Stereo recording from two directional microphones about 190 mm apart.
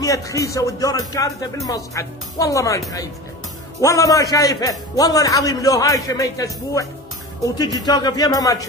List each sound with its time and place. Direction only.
0.0 s a man's voice: 15° left (ahead or behind)
3.8 s a man's voice: 15° left (ahead or behind)